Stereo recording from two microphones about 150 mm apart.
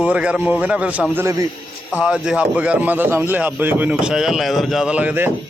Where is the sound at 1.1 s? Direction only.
20° right (ahead or behind).